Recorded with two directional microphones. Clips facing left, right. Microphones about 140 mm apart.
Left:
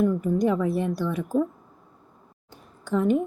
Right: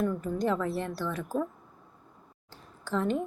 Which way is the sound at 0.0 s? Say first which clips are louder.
Left 7 dB; 15° left (ahead or behind).